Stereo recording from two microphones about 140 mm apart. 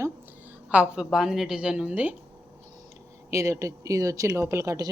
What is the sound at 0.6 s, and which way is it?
A woman's voice, 10° right (ahead or behind).